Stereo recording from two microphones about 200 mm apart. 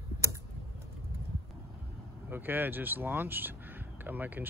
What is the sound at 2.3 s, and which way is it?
Speech, 10° right (ahead or behind).